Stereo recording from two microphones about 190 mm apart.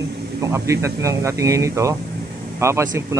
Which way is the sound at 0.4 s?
15° right (ahead or behind).